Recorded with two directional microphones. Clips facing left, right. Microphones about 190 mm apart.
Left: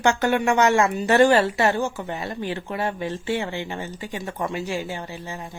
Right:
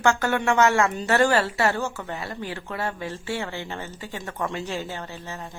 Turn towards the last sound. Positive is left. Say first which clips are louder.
# left 2 dB
turn(degrees=10)  # may be behind; listen again after turning